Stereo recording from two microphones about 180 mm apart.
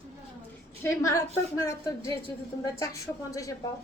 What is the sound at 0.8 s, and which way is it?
A woman's voice, 15° left (ahead or behind).